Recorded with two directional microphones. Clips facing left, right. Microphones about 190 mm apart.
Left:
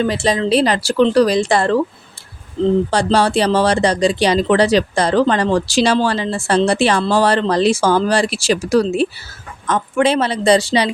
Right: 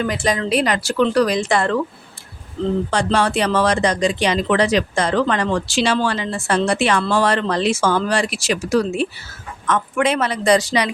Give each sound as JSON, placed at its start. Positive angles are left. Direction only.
{"t": 0.0, "sound": "speech", "side_deg": 30}
{"t": 2.9, "sound": "speech", "side_deg": 35}